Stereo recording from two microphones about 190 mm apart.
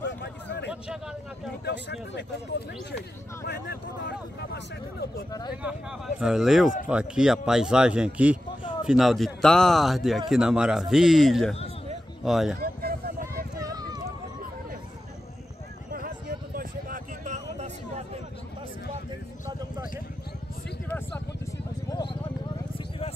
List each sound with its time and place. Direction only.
0.0 s a sound: 65° left (ahead or behind)
0.8 s a sound: centre (ahead or behind)
1.6 s speech: 65° left (ahead or behind)
3.4 s speech: 60° left (ahead or behind)
5.5 s speech: 5° right (ahead or behind)
12.5 s vehicle: 50° right (ahead or behind)
13.6 s run: 20° right (ahead or behind)
15.9 s a sound: 50° right (ahead or behind)
21.5 s vehicle: 20° left (ahead or behind)